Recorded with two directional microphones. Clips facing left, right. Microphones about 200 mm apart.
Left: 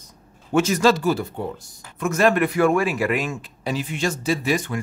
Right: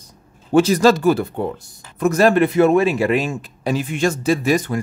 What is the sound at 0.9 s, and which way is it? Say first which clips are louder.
Speech: right 5 dB; 55° right (ahead or behind).